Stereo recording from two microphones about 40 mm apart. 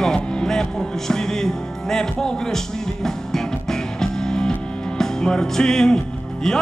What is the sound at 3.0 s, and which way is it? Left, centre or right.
Music, centre.